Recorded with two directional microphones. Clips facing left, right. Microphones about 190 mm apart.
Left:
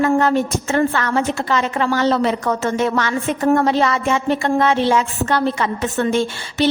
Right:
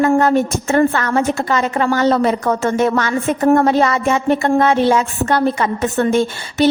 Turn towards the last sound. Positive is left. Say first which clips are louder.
# right 3 dB
turn(degrees=-45)  # may be behind; listen again after turning